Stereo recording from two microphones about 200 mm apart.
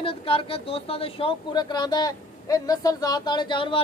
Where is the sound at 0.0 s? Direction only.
25° left (ahead or behind).